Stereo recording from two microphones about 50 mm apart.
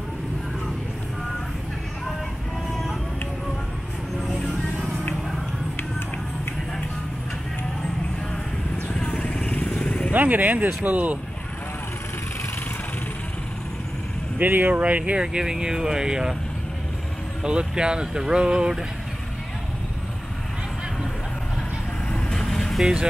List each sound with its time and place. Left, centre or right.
9.0 s vehicle: left
10.1 s speech: right
14.4 s speech: right
14.8 s speech: right
15.1 s speech: centre
17.4 s speech: centre
22.3 s vehicle: centre